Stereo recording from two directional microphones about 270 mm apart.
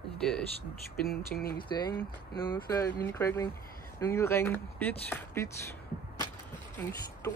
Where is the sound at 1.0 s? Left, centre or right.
Left.